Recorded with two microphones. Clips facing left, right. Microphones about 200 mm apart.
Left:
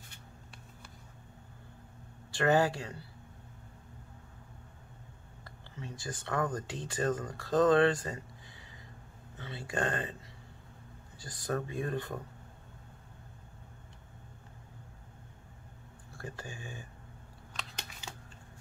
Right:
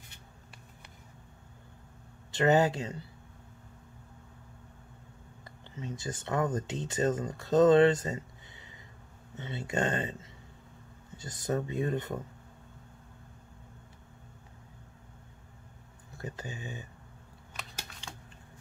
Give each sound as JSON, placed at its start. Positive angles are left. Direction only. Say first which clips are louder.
{"t": 2.3, "sound": "speech", "louder": "right 2 dB", "side_deg": -20}
{"t": 5.4, "sound": "speech", "louder": "right 4 dB", "side_deg": -20}
{"t": 9.4, "sound": "speech", "louder": "right 3 dB", "side_deg": -20}
{"t": 11.1, "sound": "speech", "louder": "right 3 dB", "side_deg": -20}
{"t": 16.1, "sound": "speech", "louder": "right 3 dB", "side_deg": -20}
{"t": 18.0, "sound": "typing", "louder": "left 1 dB", "side_deg": 5}